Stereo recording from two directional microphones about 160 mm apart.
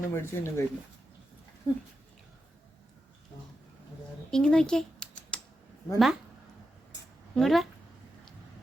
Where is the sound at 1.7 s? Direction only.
20° left (ahead or behind).